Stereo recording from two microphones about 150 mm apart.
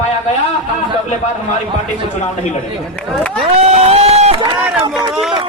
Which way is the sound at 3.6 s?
45° right (ahead or behind).